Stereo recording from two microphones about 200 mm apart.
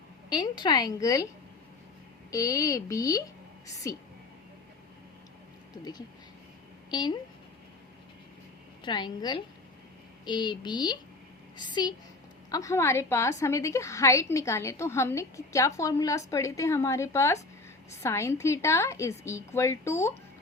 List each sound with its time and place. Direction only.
0.3 s a woman's voice: 20° left (ahead or behind)
2.3 s a woman's voice: 15° left (ahead or behind)
5.7 s a woman's voice: 20° left (ahead or behind)
8.8 s a woman's voice: 20° left (ahead or behind)